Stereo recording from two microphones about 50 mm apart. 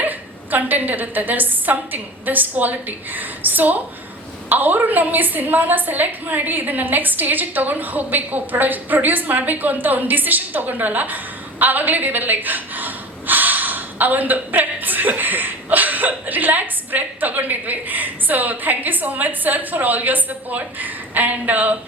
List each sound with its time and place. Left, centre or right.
0.0 s a woman's voice: right